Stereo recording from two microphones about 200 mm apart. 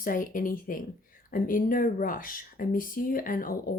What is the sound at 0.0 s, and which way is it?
Speech, 45° left (ahead or behind).